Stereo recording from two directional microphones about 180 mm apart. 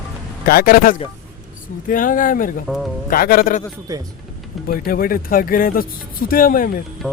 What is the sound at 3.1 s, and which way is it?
Speech, 55° left (ahead or behind).